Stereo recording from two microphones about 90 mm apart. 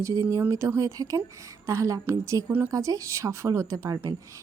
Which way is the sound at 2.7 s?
40° right (ahead or behind).